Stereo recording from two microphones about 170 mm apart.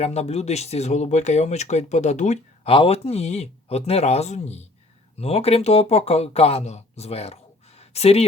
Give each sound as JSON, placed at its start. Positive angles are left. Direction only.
{"t": 0.0, "sound": "speech", "side_deg": 40}